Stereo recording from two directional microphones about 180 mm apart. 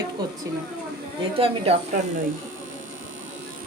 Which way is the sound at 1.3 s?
35° right (ahead or behind).